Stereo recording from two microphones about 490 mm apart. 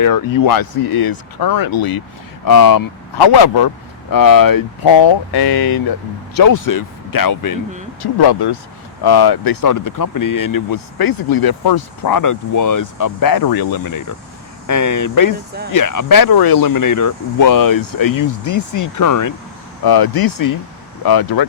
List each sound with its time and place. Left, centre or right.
0.0 s speech: left
8.0 s speech: left